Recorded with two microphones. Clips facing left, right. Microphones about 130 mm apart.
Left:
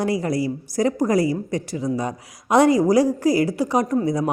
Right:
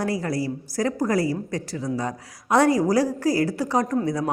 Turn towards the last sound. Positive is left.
turn(degrees=15)  # may be behind; listen again after turning